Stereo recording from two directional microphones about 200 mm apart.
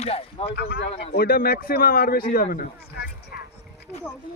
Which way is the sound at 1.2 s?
50° left (ahead or behind).